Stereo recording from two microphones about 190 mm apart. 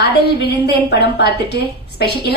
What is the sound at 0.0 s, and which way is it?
A woman's voice, 60° left (ahead or behind).